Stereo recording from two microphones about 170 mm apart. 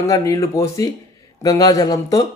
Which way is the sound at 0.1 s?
20° left (ahead or behind).